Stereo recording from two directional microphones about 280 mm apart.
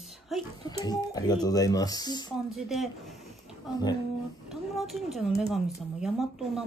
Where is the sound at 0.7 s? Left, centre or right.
Centre.